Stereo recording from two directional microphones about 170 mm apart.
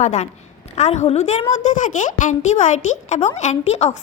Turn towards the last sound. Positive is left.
turn(degrees=40)  # may be behind; listen again after turning